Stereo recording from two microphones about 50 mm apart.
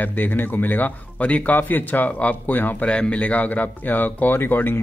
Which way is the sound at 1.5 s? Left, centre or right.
Left.